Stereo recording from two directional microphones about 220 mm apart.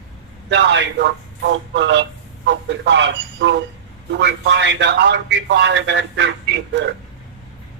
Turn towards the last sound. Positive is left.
turn(degrees=-55)  # may be behind; listen again after turning